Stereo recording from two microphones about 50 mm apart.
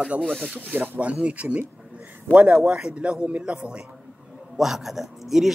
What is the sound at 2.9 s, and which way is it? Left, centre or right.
Speech, right.